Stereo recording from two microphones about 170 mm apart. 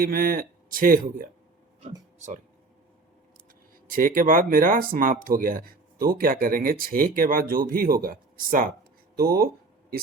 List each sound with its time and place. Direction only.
0.0 s speech: 55° right (ahead or behind)
3.8 s speech: 55° right (ahead or behind)